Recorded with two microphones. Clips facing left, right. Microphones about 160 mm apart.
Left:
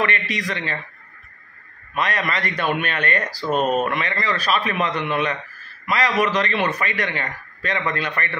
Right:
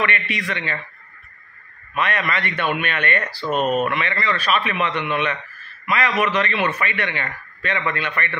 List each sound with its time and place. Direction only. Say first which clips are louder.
0.0 s a man's voice: left 1 dB; 35° left (ahead or behind)
2.0 s a man's voice: right 1 dB; 35° left (ahead or behind)